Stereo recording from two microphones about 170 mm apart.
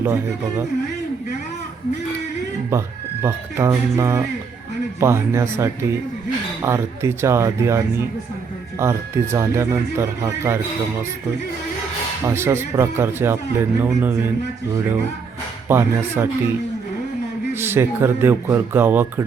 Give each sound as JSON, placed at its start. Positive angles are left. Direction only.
{"t": 2.6, "sound": "speech", "side_deg": -15}
{"t": 12.3, "sound": "speech", "side_deg": -15}
{"t": 15.7, "sound": "speech", "side_deg": -15}
{"t": 17.6, "sound": "speech", "side_deg": -15}